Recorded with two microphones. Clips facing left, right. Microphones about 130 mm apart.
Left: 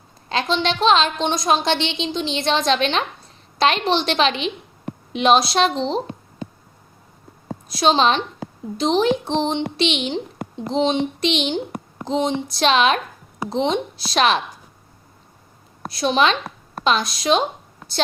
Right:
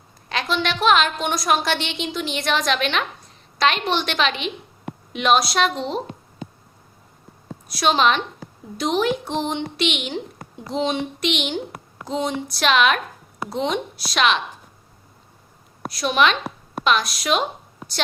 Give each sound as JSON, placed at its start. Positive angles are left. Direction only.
{"t": 0.3, "sound": "a woman's voice", "side_deg": 25}
{"t": 7.7, "sound": "a woman's voice", "side_deg": 30}
{"t": 15.9, "sound": "a woman's voice", "side_deg": 30}